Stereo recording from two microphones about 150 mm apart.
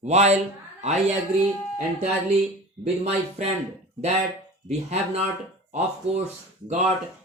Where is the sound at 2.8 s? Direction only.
45° right (ahead or behind).